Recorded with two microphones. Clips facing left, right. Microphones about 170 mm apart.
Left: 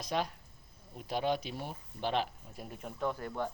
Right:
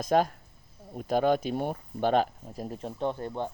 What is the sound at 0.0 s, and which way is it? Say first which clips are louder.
Speech: right 10 dB; 50° right (ahead or behind).